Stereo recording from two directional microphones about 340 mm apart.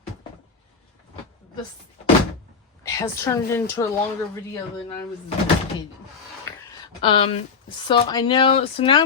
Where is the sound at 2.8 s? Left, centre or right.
Centre.